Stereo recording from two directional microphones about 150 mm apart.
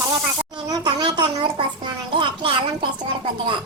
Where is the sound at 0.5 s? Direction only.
30° right (ahead or behind).